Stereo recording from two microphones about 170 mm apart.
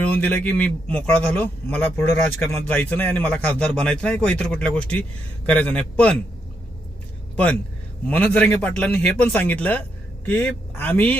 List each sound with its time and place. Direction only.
0.0 s a man's voice: 10° left (ahead or behind)
8.0 s a man's voice: 10° left (ahead or behind)